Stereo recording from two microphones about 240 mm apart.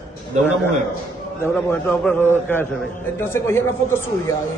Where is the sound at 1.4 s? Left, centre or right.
Centre.